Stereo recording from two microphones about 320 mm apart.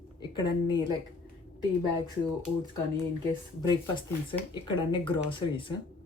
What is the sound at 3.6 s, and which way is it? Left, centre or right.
Speech, centre.